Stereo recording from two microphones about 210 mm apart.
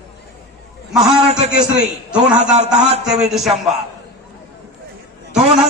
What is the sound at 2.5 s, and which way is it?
Speech, 30° right (ahead or behind).